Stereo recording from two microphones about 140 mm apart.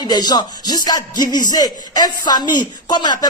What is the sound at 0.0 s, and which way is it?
Speech, 30° left (ahead or behind).